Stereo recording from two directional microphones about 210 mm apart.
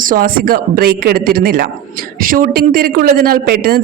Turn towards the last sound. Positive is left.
turn(degrees=-45)  # may be behind; listen again after turning